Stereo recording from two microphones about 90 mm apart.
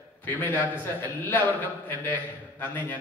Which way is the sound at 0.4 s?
20° left (ahead or behind).